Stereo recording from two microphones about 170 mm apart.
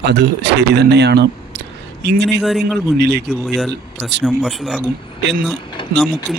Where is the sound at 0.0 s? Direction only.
80° right.